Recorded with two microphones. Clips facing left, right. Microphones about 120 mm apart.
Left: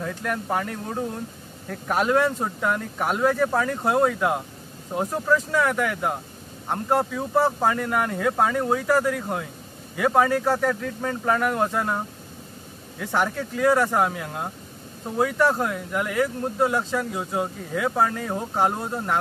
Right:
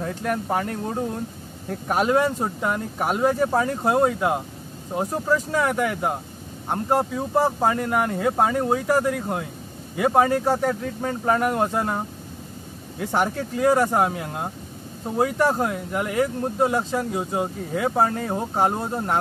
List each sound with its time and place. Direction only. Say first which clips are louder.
0.0 s speech: right 2 dB; 25° right (ahead or behind)
1.9 s speech: right 1 dB; 15° right (ahead or behind)
7.1 s speech: even; 15° right (ahead or behind)
13.0 s speech: right 1 dB; 30° right (ahead or behind)
15.1 s speech: right 1 dB; 30° right (ahead or behind)
15.4 s speech: right 1 dB; 20° right (ahead or behind)
17.7 s speech: right 1 dB; 30° right (ahead or behind)